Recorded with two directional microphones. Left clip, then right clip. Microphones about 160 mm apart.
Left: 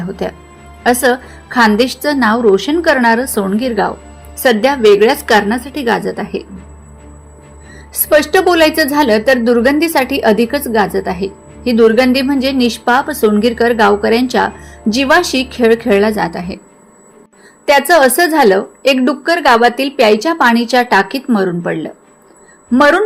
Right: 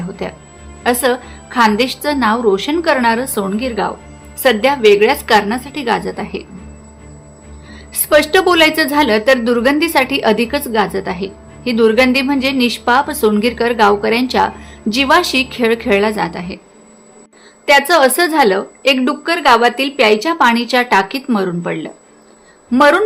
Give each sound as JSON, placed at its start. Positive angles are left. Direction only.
{"t": 0.2, "sound": "a woman's voice", "side_deg": 20}
{"t": 7.7, "sound": "a woman's voice", "side_deg": 5}
{"t": 17.7, "sound": "a woman's voice", "side_deg": 10}